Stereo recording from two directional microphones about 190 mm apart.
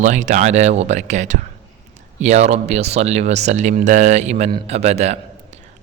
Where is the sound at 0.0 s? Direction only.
40° right (ahead or behind).